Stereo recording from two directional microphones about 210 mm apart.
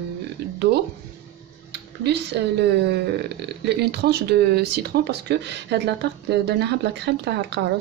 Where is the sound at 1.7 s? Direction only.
55° right (ahead or behind).